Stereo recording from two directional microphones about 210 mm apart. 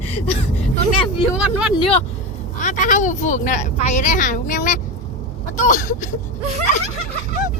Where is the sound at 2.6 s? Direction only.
35° left (ahead or behind).